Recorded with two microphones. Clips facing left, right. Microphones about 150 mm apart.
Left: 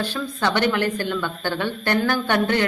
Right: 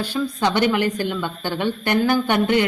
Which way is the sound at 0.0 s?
10° right (ahead or behind).